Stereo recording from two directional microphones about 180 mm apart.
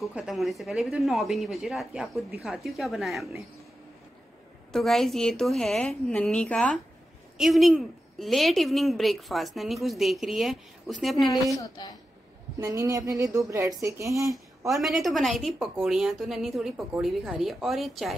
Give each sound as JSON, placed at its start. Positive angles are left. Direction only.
{"t": 0.0, "sound": "a woman's voice", "side_deg": -5}
{"t": 4.7, "sound": "a woman's voice", "side_deg": 0}
{"t": 11.5, "sound": "a woman's voice", "side_deg": 20}
{"t": 12.5, "sound": "a woman's voice", "side_deg": -20}
{"t": 14.7, "sound": "a woman's voice", "side_deg": 0}